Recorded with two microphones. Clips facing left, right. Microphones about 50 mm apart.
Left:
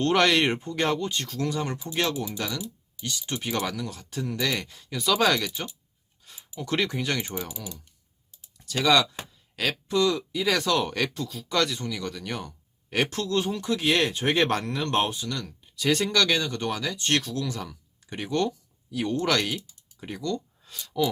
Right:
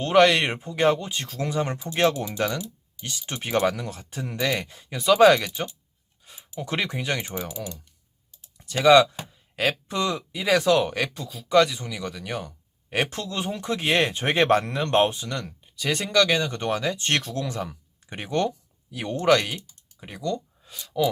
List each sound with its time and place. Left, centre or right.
0.0 s speech: centre; by 2.1 s right
2.3 s speech: right
4.1 s speech: right
6.6 s speech: centre
8.5 s speech: centre
10.3 s speech: centre
12.9 s speech: right
13.6 s speech: right
15.6 s speech: centre
16.5 s speech: right
19.5 s speech: centre